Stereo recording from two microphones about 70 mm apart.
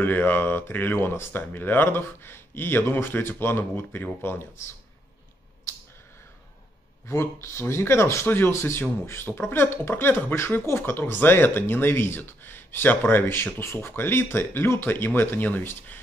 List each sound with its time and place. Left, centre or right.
0.0 s speech: left
7.1 s speech: left